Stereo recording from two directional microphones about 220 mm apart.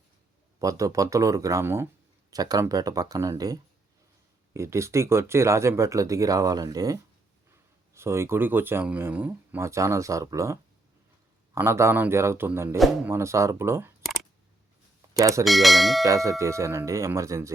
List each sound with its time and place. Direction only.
0.6 s speech: 15° right (ahead or behind)
15.2 s speech: 15° right (ahead or behind)
15.4 s speech: centre (ahead or behind)
16.0 s speech: 15° right (ahead or behind)